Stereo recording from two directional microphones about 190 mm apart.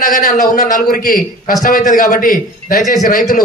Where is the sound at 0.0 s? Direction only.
40° left (ahead or behind).